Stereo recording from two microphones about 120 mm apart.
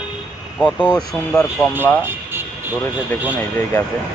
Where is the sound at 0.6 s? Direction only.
15° left (ahead or behind).